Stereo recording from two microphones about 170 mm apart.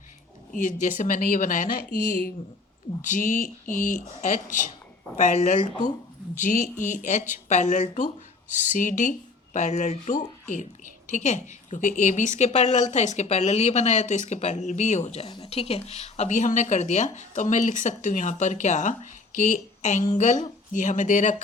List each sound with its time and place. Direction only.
0.5 s speech: 50° left (ahead or behind)